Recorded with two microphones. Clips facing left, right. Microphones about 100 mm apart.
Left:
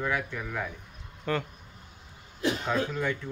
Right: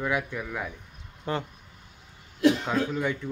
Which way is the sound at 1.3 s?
25° right (ahead or behind).